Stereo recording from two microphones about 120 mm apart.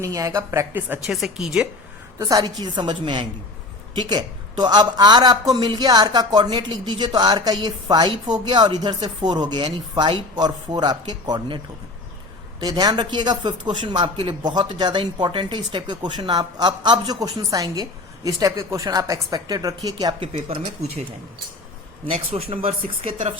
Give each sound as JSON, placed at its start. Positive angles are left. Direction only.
{"t": 0.0, "sound": "speech", "side_deg": -25}
{"t": 1.0, "sound": "speech", "side_deg": -5}
{"t": 2.1, "sound": "a woman's voice", "side_deg": -35}
{"t": 20.1, "sound": "speech", "side_deg": -45}
{"t": 22.1, "sound": "speech", "side_deg": -50}